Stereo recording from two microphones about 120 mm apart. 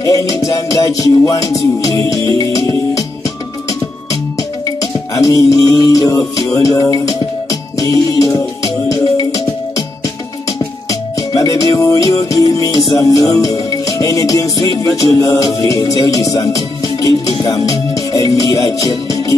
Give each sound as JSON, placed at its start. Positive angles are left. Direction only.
{"t": 0.0, "sound": "music", "side_deg": 30}
{"t": 4.4, "sound": "music", "side_deg": 30}